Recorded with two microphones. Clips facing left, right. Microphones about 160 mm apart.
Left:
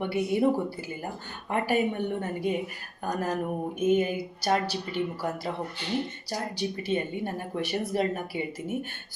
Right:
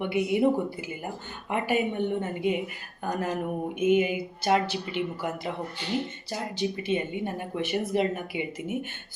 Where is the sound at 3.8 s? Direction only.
10° right (ahead or behind).